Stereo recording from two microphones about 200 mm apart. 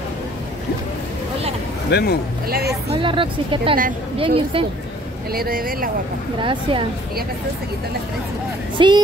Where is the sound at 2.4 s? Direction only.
50° right (ahead or behind).